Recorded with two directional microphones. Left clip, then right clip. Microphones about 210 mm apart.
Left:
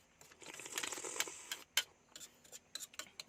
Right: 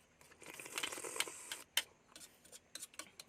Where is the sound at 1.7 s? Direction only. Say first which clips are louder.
Left 1 dB; 15° left (ahead or behind).